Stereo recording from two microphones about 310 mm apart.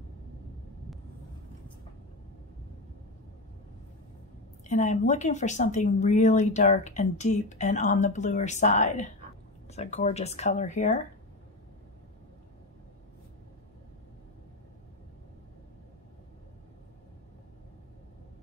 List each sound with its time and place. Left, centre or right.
4.6 s speech: left